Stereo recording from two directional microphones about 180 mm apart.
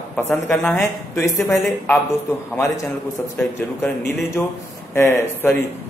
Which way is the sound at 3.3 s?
10° left (ahead or behind).